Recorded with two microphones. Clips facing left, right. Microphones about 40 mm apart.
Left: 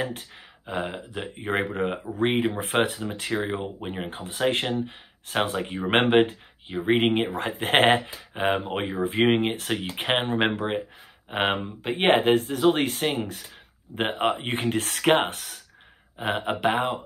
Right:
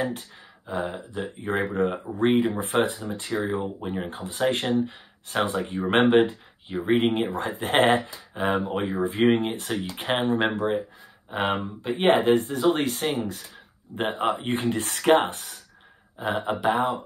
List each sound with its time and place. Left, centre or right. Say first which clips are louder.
0.7 s speech: right 1 dB; left
4.1 s speech: left 1 dB; left
15.2 s speech: right 1 dB; left
16.2 s speech: even; left